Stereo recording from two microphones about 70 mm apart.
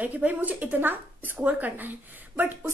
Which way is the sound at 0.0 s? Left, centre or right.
Right.